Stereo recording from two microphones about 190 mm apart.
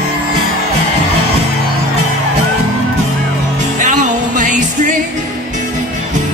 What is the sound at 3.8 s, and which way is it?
Music, 40° right (ahead or behind).